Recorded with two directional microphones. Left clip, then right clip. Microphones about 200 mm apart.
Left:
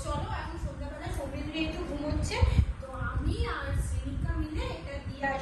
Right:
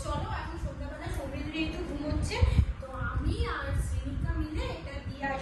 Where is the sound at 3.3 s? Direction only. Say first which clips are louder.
Left 1 dB; centre (ahead or behind).